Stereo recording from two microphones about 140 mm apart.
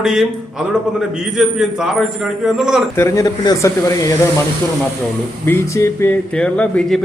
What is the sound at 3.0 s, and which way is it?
Speech, 20° left (ahead or behind).